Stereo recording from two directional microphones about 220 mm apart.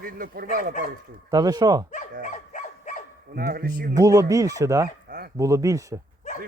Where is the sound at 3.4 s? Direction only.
40° right (ahead or behind).